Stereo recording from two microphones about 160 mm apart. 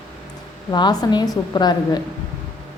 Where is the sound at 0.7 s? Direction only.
25° left (ahead or behind).